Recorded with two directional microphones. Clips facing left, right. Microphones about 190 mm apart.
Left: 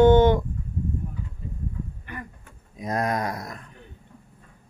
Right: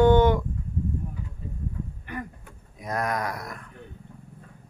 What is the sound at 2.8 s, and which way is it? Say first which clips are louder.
Speech: left 2 dB; 25° left (ahead or behind).